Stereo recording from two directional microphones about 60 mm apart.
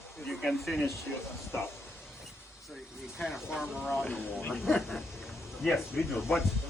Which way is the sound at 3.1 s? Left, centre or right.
Centre.